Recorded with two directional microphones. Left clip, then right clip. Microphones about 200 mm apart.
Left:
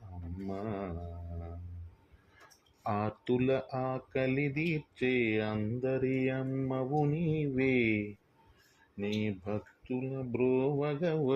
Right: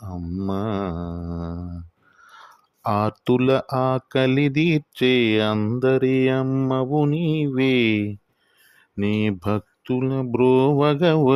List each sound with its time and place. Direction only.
0.4 s mantra: 50° right (ahead or behind)
2.8 s speech: 35° right (ahead or behind)
9.0 s speech: 55° right (ahead or behind)